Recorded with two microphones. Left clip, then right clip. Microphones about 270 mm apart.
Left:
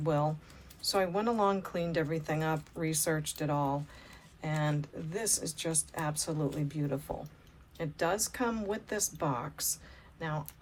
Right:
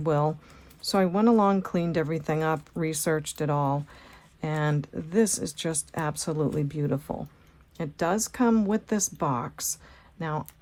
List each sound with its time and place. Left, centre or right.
0.0 s speech: right